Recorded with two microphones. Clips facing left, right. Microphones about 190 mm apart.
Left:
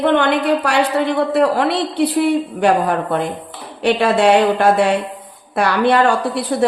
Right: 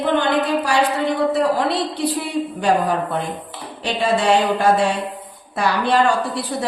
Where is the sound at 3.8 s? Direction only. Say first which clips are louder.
Left 5 dB; 65° left (ahead or behind).